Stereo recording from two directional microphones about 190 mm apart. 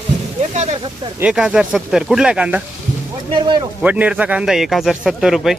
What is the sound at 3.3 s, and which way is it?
Speech, 25° right (ahead or behind).